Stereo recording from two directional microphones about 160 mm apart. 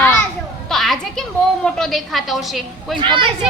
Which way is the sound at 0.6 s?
Centre (ahead or behind).